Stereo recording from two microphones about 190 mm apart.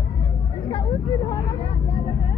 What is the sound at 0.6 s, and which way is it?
Vehicle, 25° left (ahead or behind).